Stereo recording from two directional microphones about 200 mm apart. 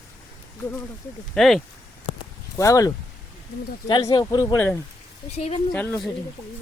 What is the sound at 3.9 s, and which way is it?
Speech, 20° left (ahead or behind).